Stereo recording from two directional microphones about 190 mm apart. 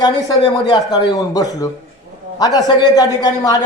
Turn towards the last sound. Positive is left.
turn(degrees=20)  # may be behind; listen again after turning